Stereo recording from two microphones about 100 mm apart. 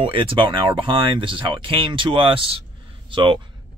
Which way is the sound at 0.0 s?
65° right (ahead or behind).